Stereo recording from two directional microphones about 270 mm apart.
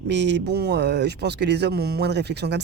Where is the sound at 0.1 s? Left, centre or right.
Right.